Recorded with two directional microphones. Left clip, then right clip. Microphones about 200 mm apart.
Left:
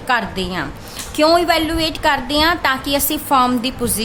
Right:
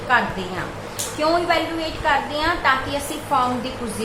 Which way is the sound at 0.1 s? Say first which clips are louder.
Left 1 dB; 60° left (ahead or behind).